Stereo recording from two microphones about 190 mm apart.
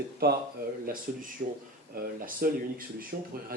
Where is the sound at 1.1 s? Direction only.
45° right (ahead or behind).